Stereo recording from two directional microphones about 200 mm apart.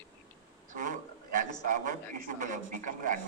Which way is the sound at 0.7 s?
40° right (ahead or behind).